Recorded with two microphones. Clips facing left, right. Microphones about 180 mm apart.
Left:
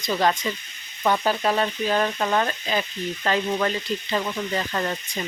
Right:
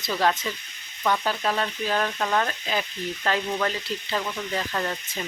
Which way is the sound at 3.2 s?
Centre (ahead or behind).